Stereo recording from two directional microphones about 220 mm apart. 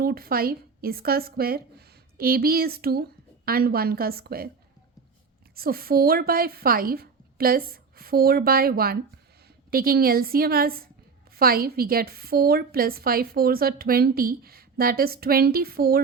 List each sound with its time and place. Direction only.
0.0 s a woman's voice: 45° right (ahead or behind)
5.5 s a woman's voice: 40° right (ahead or behind)